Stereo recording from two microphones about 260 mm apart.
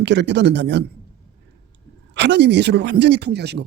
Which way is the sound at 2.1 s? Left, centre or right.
Right.